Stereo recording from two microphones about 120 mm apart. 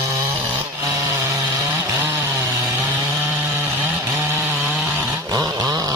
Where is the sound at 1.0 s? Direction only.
20° right (ahead or behind).